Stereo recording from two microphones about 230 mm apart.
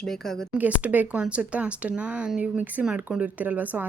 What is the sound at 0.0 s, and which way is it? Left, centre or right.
Cutlery, centre.